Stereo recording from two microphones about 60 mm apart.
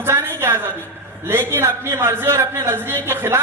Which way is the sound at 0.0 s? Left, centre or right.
Right.